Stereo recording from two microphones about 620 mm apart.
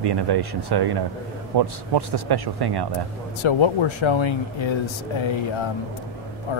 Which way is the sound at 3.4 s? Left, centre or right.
Left.